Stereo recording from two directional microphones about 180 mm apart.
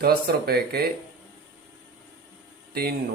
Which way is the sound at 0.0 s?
60° right (ahead or behind).